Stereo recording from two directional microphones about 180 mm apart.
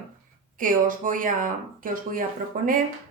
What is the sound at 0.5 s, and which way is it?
Speech, 50° right (ahead or behind).